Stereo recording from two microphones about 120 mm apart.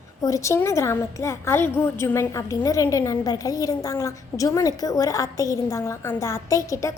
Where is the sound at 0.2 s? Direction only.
25° left (ahead or behind).